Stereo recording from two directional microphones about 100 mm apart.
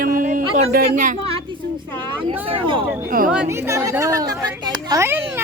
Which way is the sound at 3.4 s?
30° right (ahead or behind).